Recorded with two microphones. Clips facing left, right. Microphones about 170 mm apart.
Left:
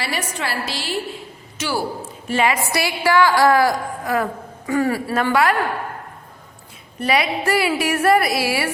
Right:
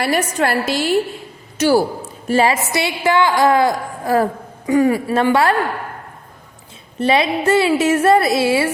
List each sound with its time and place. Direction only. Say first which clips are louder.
0.0 s a woman's voice: right 8 dB; 50° right (ahead or behind)
2.6 s a woman's voice: right 2 dB; 20° right (ahead or behind)
4.6 s a man's voice: right 5 dB; 15° right (ahead or behind)
7.0 s a woman's voice: right 4 dB; 25° right (ahead or behind)